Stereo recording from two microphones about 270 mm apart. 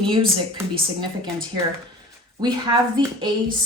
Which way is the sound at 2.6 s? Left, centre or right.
Centre.